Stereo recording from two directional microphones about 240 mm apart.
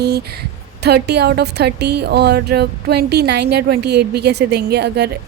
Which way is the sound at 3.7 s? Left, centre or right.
Right.